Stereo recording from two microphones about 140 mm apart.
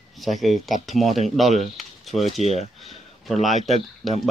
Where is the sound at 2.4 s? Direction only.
50° left (ahead or behind).